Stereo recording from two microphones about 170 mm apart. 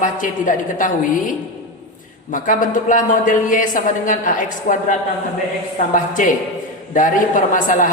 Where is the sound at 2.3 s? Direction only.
50° left (ahead or behind).